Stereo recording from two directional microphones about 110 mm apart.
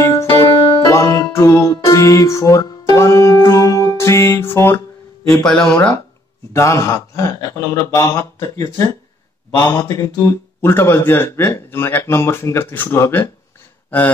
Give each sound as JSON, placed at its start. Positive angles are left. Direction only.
{"t": 0.0, "sound": "music", "side_deg": 25}
{"t": 4.6, "sound": "speech", "side_deg": 20}
{"t": 5.3, "sound": "speech", "side_deg": 5}
{"t": 6.5, "sound": "speech", "side_deg": 25}